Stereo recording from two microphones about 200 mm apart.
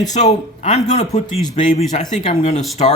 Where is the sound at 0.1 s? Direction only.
35° left (ahead or behind).